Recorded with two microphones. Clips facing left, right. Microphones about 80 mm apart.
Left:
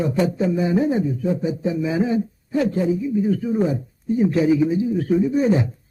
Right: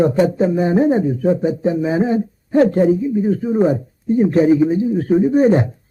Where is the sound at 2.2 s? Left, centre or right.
Right.